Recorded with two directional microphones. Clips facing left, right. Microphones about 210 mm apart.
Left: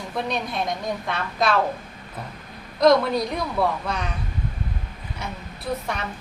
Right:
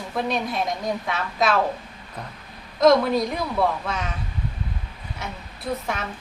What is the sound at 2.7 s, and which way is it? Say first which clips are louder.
A woman's voice: right 1 dB; centre (ahead or behind).